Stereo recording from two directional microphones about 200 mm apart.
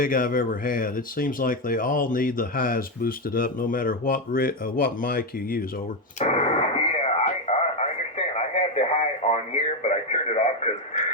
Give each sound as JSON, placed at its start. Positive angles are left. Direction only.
{"t": 0.0, "sound": "speech", "side_deg": 45}
{"t": 6.1, "sound": "radio", "side_deg": 35}